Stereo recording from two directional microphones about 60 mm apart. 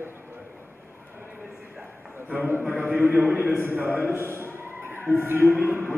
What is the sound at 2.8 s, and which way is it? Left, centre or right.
A man's voice, right.